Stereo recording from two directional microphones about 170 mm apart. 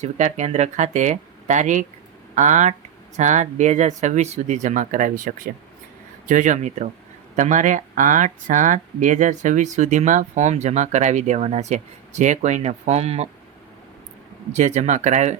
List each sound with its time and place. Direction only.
0.0 s speech: 45° right (ahead or behind)
14.5 s speech: 40° right (ahead or behind)